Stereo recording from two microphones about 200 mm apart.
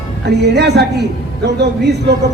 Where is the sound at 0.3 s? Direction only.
55° right (ahead or behind).